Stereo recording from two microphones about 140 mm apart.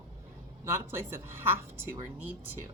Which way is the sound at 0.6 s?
15° right (ahead or behind).